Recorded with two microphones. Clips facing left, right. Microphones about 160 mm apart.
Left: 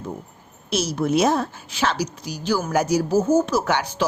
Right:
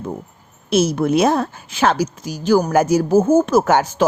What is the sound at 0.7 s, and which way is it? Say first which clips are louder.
A woman's voice: right 6 dB; 55° right (ahead or behind).